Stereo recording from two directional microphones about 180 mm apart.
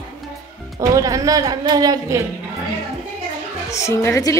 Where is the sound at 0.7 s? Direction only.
20° right (ahead or behind).